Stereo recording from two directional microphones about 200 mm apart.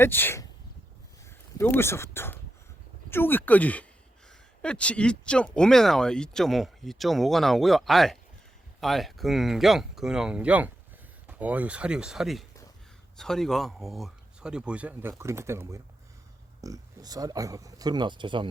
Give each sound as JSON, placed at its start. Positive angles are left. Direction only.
{"t": 0.0, "sound": "speech", "side_deg": 10}
{"t": 1.5, "sound": "speech", "side_deg": 10}